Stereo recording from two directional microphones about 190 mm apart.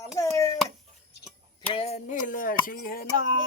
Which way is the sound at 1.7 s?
35° left (ahead or behind).